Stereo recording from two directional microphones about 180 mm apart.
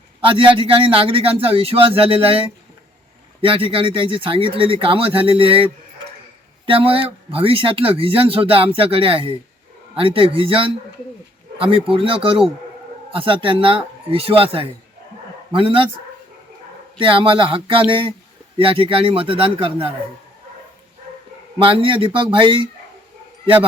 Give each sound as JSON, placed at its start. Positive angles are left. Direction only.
{"t": 0.3, "sound": "speech", "side_deg": -30}
{"t": 6.7, "sound": "speech", "side_deg": -30}
{"t": 17.0, "sound": "speech", "side_deg": -30}
{"t": 21.6, "sound": "speech", "side_deg": -30}